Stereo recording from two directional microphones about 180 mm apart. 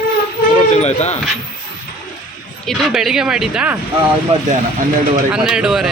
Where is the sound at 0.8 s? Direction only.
40° left (ahead or behind).